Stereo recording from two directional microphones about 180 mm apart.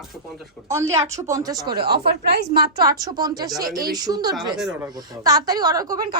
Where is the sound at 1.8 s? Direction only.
60° right (ahead or behind).